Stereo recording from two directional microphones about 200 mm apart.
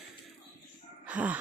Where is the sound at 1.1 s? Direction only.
5° right (ahead or behind).